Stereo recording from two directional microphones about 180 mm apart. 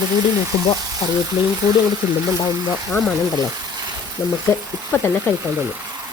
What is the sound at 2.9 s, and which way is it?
Speech, centre (ahead or behind).